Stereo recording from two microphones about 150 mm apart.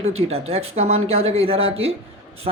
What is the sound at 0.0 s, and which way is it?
Speech, 45° right (ahead or behind).